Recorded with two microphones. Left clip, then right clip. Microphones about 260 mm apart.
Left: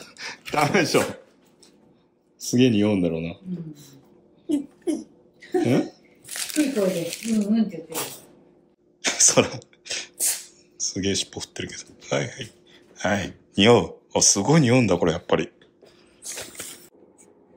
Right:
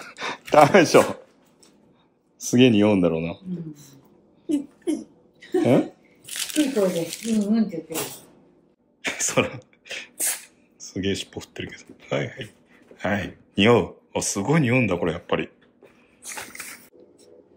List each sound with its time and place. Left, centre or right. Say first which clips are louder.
0.0 s a sound: right 5 dB; right
0.5 s speech: right 7 dB; right
0.8 s a man's voice: right 5 dB; centre
2.5 s a man's voice: right 3 dB; centre
9.0 s a sound: left 4 dB; centre
10.8 s speech: left 2 dB; centre